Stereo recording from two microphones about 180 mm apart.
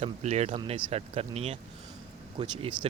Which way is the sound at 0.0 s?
40° right (ahead or behind).